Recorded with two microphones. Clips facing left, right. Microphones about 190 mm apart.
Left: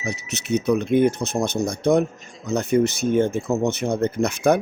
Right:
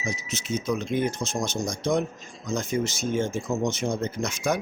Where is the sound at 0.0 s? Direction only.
65° left (ahead or behind).